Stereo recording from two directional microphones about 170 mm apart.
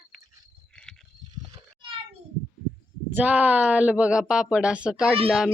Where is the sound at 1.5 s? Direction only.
30° right (ahead or behind).